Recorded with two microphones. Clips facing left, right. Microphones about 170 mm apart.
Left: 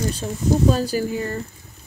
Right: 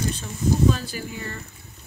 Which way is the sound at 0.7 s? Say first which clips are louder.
Left 10 dB; 40° left (ahead or behind).